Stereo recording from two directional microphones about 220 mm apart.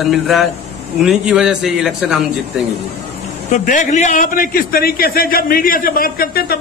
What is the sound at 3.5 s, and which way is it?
A man's voice, 35° left (ahead or behind).